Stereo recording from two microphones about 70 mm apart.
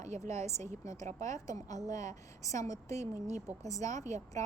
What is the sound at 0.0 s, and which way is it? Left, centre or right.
Speech, left.